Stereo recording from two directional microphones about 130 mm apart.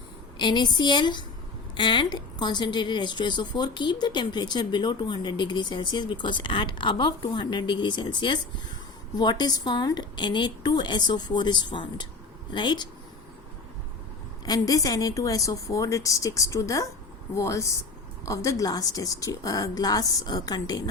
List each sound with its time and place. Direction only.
0.3 s a woman's voice: 35° left (ahead or behind)
14.4 s a woman's voice: 30° left (ahead or behind)